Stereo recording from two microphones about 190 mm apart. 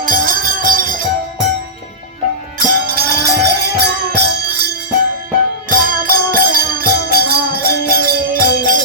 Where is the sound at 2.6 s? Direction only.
55° right (ahead or behind).